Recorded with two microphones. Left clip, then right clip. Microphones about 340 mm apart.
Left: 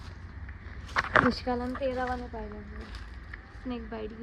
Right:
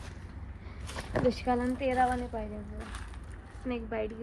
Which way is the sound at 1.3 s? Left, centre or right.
Left.